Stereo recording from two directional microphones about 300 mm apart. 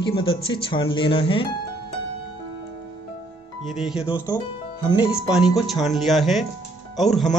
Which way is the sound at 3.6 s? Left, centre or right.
Centre.